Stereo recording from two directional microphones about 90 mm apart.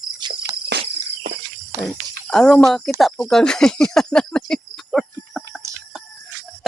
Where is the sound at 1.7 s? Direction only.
35° right (ahead or behind).